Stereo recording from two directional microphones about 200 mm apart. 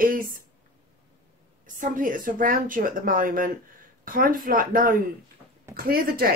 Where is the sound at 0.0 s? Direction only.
45° right (ahead or behind).